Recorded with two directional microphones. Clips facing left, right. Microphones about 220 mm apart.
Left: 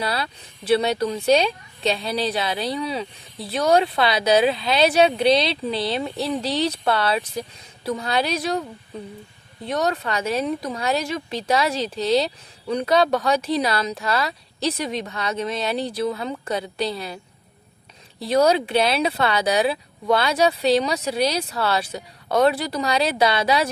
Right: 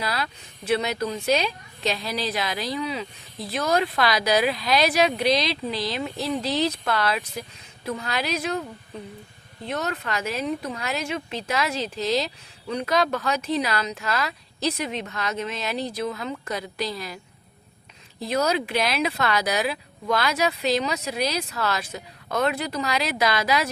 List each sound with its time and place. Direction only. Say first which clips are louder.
0.0 s speech: left 3 dB; 30° left (ahead or behind)
9.9 s speech: left 4 dB; 35° left (ahead or behind)
18.2 s speech: left 6 dB; 30° left (ahead or behind)